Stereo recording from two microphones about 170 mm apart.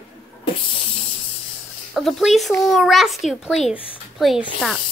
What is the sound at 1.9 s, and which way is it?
A child's voice, centre (ahead or behind).